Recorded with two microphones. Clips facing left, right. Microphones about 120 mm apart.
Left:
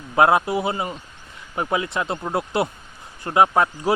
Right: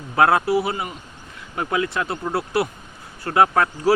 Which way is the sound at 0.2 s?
20° left (ahead or behind).